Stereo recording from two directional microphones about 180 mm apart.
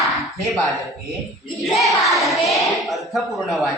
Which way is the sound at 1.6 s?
Centre (ahead or behind).